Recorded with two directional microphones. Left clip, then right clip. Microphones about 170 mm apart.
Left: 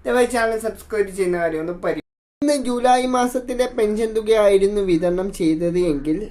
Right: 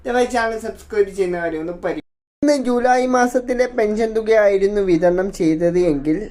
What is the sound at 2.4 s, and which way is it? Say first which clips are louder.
Speech: right 2 dB; 10° right (ahead or behind).